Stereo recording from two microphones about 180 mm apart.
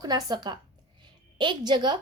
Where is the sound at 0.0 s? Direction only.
20° right (ahead or behind).